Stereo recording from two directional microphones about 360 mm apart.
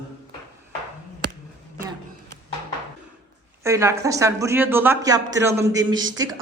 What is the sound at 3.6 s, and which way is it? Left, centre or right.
Speech, centre.